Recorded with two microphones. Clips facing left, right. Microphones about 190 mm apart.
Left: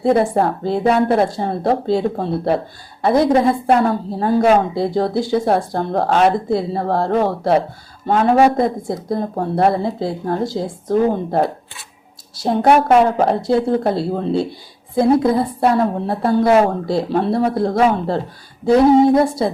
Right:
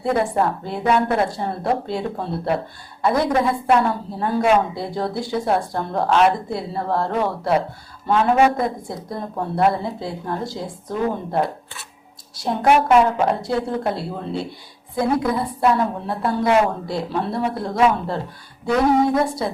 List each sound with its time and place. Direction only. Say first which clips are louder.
0.0 s speech: left 5 dB; 30° left (ahead or behind)